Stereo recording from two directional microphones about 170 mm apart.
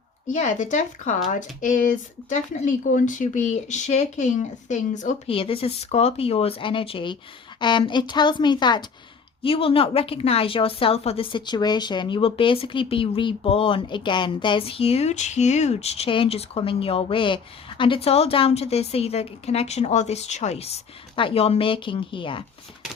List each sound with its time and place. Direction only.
0.3 s speech: 45° left (ahead or behind)
5.3 s a woman's voice: 30° left (ahead or behind)